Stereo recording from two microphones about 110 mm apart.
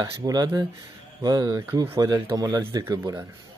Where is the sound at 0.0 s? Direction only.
35° right (ahead or behind).